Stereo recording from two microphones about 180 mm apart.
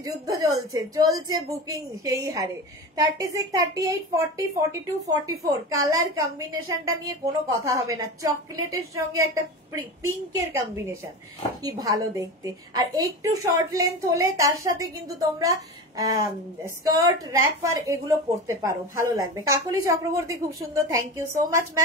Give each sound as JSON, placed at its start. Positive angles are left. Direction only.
{"t": 0.0, "sound": "a woman's voice", "side_deg": -20}